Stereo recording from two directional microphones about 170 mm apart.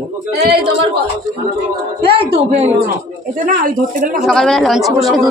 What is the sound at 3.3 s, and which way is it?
Speech, 55° right (ahead or behind).